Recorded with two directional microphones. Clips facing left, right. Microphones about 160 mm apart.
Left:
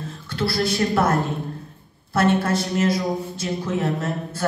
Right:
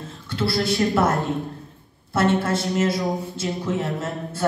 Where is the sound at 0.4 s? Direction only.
20° right (ahead or behind).